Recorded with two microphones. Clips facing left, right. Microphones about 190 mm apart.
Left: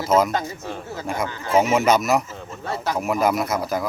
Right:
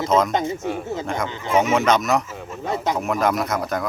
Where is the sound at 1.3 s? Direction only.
20° right (ahead or behind).